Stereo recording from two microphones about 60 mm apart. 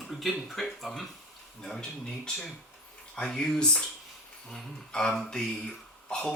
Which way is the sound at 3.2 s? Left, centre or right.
Centre.